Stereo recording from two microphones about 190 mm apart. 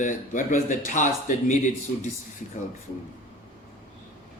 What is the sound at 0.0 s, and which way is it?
A man's voice, 40° left (ahead or behind).